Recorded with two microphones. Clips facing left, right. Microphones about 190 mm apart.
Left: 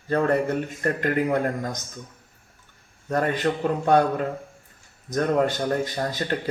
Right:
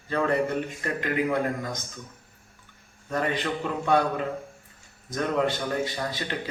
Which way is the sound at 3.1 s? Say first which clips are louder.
Left 4 dB; 45° left (ahead or behind).